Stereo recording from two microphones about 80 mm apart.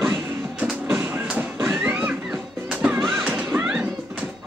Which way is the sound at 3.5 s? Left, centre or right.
Centre.